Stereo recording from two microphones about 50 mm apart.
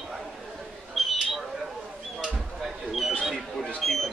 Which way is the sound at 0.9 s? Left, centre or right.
Centre.